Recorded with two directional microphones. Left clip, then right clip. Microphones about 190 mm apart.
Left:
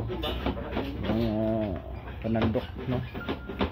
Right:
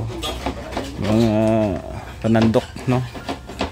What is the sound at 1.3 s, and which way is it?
Speech, 50° right (ahead or behind).